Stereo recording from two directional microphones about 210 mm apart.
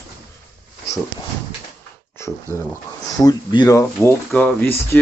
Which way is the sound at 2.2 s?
10° left (ahead or behind).